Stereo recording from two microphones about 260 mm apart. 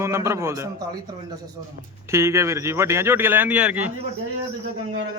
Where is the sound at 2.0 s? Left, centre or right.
Centre.